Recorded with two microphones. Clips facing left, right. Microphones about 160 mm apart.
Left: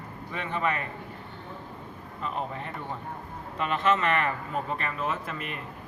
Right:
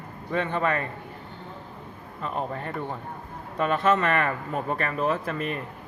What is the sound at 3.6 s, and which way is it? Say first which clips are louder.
Speech: right 3 dB; 40° right (ahead or behind).